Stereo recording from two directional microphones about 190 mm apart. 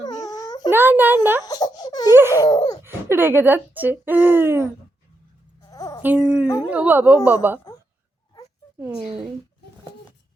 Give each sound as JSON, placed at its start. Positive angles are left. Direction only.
{"t": 0.0, "sound": "wail", "side_deg": 20}
{"t": 0.7, "sound": "a child's voice", "side_deg": -10}
{"t": 1.5, "sound": "baby cry", "side_deg": 20}
{"t": 2.3, "sound": "a sound", "side_deg": 20}
{"t": 2.8, "sound": "speech", "side_deg": -10}
{"t": 5.7, "sound": "a sound", "side_deg": 20}
{"t": 6.0, "sound": "speech", "side_deg": -5}
{"t": 9.0, "sound": "speech", "side_deg": 0}